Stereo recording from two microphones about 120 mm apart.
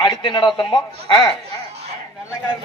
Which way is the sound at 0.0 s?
40° left (ahead or behind).